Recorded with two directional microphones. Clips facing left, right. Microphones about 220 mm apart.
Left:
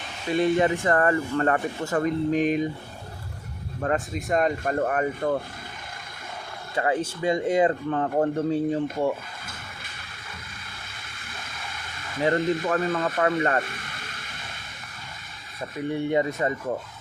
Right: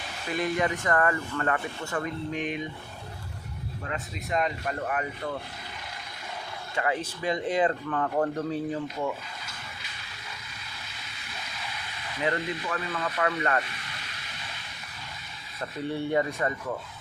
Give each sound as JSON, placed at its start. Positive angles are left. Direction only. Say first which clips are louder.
{"t": 0.3, "sound": "speech", "louder": "left 6 dB", "side_deg": 25}
{"t": 3.8, "sound": "speech", "louder": "left 10 dB", "side_deg": 50}
{"t": 6.7, "sound": "speech", "louder": "left 4 dB", "side_deg": 30}
{"t": 9.0, "sound": "a sound", "louder": "left 6 dB", "side_deg": 50}
{"t": 11.0, "sound": "a sound", "louder": "left 1 dB", "side_deg": 50}
{"t": 15.8, "sound": "speech", "louder": "left 3 dB", "side_deg": 15}